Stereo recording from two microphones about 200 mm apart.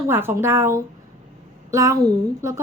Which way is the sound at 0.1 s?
10° right (ahead or behind).